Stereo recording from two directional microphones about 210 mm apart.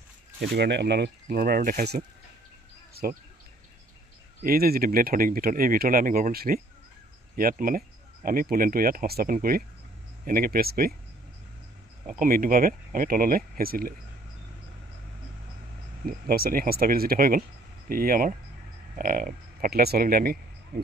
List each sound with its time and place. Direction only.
0.4 s speech: 55° right (ahead or behind)
2.9 s bird: 45° right (ahead or behind)
4.4 s speech: 45° right (ahead or behind)
12.1 s speech: 40° right (ahead or behind)
16.1 s speech: 45° right (ahead or behind)
20.7 s a sound: 45° right (ahead or behind)